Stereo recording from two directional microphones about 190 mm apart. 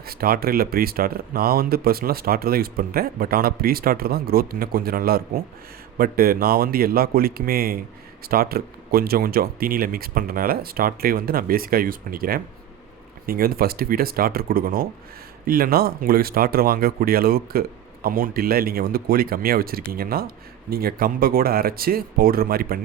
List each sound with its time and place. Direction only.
0.0 s speech: 50° right (ahead or behind)